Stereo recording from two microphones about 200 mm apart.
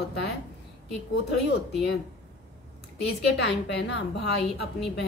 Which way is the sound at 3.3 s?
60° left (ahead or behind).